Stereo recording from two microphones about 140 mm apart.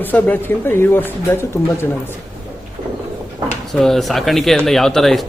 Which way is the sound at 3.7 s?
Centre (ahead or behind).